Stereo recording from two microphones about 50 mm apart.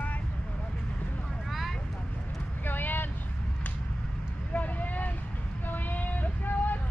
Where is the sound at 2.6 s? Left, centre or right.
Left.